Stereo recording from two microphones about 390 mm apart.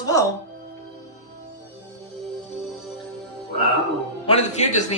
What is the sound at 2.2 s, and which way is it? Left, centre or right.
Music, centre.